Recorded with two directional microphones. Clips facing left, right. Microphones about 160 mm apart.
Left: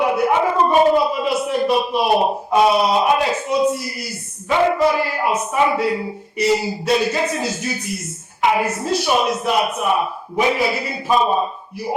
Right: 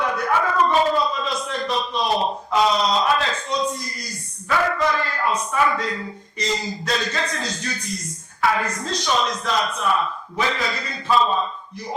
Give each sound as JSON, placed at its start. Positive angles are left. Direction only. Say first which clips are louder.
{"t": 0.0, "sound": "a sound", "louder": "left 5 dB", "side_deg": 15}
{"t": 4.4, "sound": "music", "louder": "left 5 dB", "side_deg": 20}
{"t": 4.9, "sound": "speech", "louder": "left 4 dB", "side_deg": 10}
{"t": 5.5, "sound": "music", "louder": "left 3 dB", "side_deg": 20}
{"t": 5.7, "sound": "speech", "louder": "left 7 dB", "side_deg": 10}
{"t": 8.4, "sound": "a woman's voice", "louder": "left 4 dB", "side_deg": 20}
{"t": 8.8, "sound": "speech", "louder": "left 5 dB", "side_deg": 10}